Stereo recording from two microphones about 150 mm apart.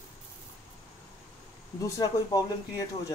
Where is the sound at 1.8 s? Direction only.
25° left (ahead or behind).